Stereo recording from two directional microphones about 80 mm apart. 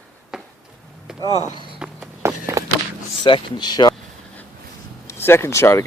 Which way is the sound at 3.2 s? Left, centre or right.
Left.